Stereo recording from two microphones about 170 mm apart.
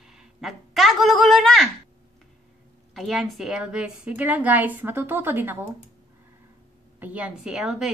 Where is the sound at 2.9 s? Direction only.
Centre (ahead or behind).